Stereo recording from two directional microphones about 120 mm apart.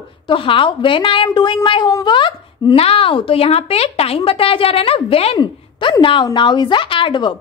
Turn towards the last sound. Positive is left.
turn(degrees=40)  # may be behind; listen again after turning